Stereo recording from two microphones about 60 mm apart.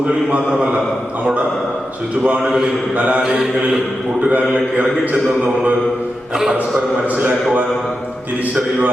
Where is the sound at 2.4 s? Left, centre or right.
Centre.